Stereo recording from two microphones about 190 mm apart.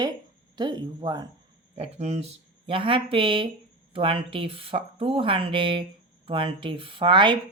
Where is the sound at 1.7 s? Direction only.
35° right (ahead or behind).